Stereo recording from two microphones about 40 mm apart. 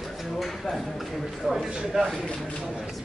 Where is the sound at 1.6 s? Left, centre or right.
Centre.